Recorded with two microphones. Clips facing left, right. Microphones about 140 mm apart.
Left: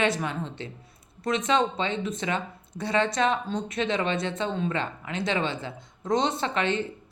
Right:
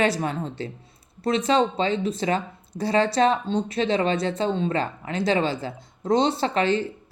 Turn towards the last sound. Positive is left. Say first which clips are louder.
# right 4 dB
turn(degrees=-35)  # may be behind; listen again after turning